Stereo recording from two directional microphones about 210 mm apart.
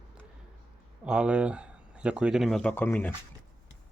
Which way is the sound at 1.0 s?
5° right (ahead or behind).